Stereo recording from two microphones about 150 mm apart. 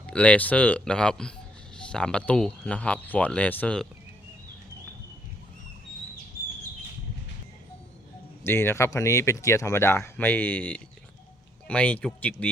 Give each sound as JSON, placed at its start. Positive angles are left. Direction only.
{"t": 0.1, "sound": "speech", "side_deg": 10}
{"t": 8.4, "sound": "speech", "side_deg": 15}